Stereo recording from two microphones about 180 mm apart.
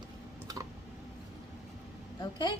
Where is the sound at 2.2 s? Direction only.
25° left (ahead or behind).